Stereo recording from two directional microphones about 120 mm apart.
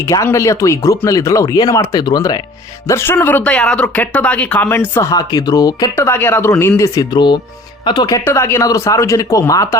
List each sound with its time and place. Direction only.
0.0 s speech: 25° left (ahead or behind)
2.8 s speech: 20° left (ahead or behind)
5.1 s speech: 35° left (ahead or behind)
6.0 s speech: 20° left (ahead or behind); by 8.2 s 35° left (ahead or behind)
8.2 s speech: 20° left (ahead or behind)